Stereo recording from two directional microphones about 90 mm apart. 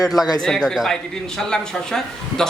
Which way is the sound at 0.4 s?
5° left (ahead or behind).